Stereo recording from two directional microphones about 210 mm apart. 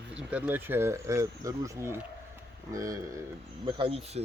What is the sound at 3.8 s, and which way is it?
Speech, 25° right (ahead or behind).